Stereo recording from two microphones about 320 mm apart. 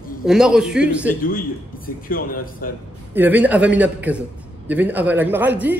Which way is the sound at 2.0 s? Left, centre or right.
Left.